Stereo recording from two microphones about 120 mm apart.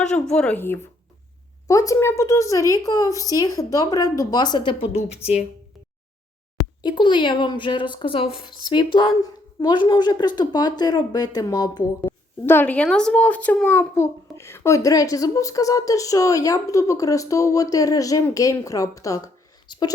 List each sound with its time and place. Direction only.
0.0 s a woman's voice: 10° left (ahead or behind)
1.6 s speech: 30° left (ahead or behind)
4.9 s speech: 60° left (ahead or behind)
6.8 s a woman's voice: 40° left (ahead or behind)
12.0 s speech: 15° left (ahead or behind); by 19.9 s 35° left (ahead or behind)